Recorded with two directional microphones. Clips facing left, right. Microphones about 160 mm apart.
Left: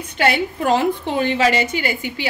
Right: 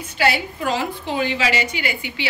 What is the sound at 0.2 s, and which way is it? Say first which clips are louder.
A woman's voice: left 2 dB; 50° left (ahead or behind).